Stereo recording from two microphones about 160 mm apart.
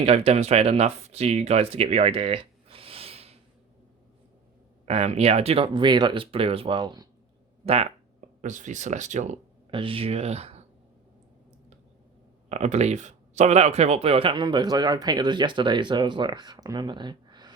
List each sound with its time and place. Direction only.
0.0 s speech: 40° right (ahead or behind)
4.9 s speech: 45° right (ahead or behind); by 7.1 s 25° right (ahead or behind)
7.6 s speech: 40° right (ahead or behind)
8.4 s speech: 50° right (ahead or behind)
9.6 s speech: 35° right (ahead or behind)
12.5 s speech: 45° right (ahead or behind); by 17.5 s 25° right (ahead or behind)